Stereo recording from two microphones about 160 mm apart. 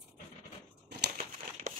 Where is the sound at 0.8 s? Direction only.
90° right.